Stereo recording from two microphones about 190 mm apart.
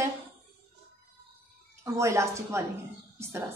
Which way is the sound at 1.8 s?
15° right (ahead or behind).